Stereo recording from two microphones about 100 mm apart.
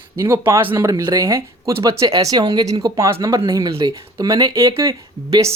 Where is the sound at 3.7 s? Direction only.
60° right (ahead or behind).